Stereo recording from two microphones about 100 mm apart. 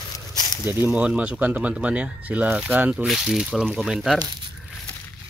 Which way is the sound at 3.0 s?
Centre (ahead or behind).